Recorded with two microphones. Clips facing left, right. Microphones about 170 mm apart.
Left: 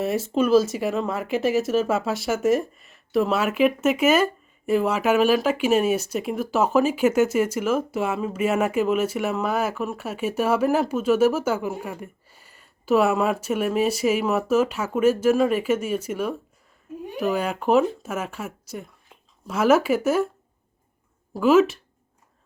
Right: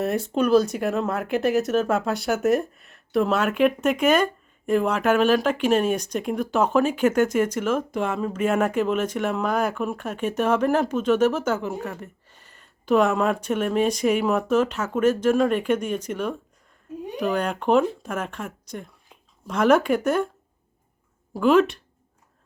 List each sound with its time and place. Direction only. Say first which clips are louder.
0.0 s speech: even; centre (ahead or behind)
21.3 s speech: left 1 dB; 5° left (ahead or behind)